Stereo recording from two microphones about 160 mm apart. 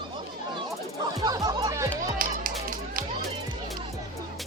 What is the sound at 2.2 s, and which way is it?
Music, 60° right (ahead or behind).